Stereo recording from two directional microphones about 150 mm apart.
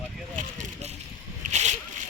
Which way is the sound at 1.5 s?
55° right (ahead or behind).